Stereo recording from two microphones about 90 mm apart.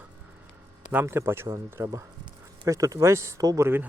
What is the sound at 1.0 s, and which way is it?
Speech, 30° right (ahead or behind).